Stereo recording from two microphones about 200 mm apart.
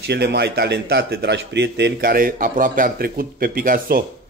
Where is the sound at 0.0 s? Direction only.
55° right (ahead or behind).